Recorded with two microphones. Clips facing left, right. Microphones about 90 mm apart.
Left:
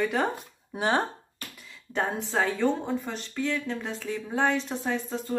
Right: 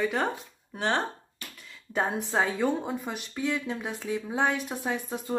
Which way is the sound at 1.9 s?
15° right (ahead or behind).